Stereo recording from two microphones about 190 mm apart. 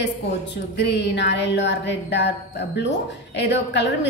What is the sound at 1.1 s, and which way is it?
Speech, 65° left (ahead or behind).